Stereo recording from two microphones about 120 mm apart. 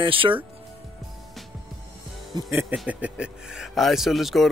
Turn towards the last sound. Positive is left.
turn(degrees=0)  # may be behind; listen again after turning